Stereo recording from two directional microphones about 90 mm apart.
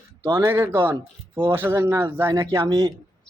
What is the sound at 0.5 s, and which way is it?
Speech, 25° right (ahead or behind).